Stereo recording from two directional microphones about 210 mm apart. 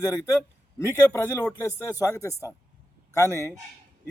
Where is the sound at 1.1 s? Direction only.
15° left (ahead or behind).